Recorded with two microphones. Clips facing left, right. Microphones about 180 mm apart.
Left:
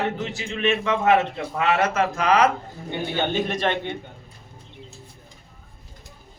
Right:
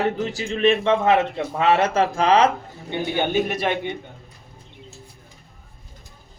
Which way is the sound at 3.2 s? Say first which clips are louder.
Right 2 dB; 10° right (ahead or behind).